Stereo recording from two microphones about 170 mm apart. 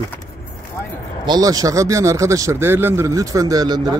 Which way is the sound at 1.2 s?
25° right (ahead or behind).